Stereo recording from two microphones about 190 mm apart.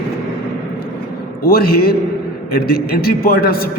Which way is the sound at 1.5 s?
50° left (ahead or behind).